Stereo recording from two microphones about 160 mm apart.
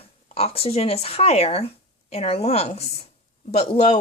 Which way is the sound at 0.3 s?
40° left (ahead or behind).